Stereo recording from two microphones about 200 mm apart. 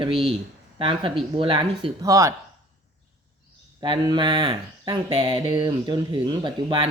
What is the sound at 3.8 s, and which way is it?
Speech, 25° right (ahead or behind).